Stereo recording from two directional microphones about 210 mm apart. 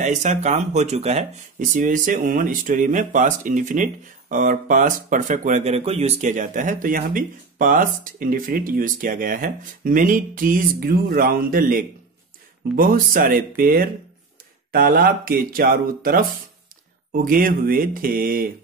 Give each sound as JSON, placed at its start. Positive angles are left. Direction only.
{"t": 0.0, "sound": "speech", "side_deg": -35}